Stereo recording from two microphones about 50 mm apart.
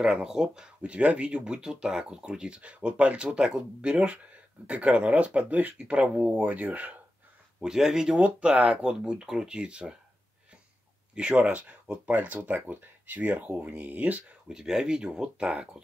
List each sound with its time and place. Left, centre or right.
0.0 s speech: centre
0.8 s speech: right
5.9 s speech: right
6.4 s speech: right
7.6 s speech: centre
8.2 s speech: right
11.1 s speech: right
14.5 s speech: centre